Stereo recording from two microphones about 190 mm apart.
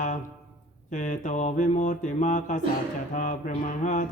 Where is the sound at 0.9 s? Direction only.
40° left (ahead or behind).